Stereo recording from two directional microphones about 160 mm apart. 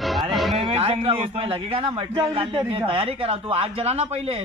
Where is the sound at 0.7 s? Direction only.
40° right (ahead or behind).